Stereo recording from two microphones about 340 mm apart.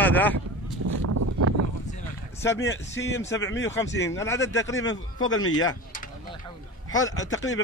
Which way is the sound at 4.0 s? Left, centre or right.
Centre.